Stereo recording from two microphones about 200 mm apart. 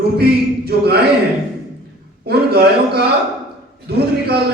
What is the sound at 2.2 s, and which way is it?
A man's voice, 50° right (ahead or behind).